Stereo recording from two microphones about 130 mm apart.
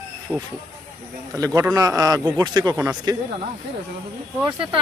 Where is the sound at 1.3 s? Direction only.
25° right (ahead or behind).